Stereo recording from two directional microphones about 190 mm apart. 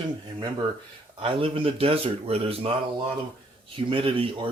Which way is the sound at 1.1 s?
25° right (ahead or behind).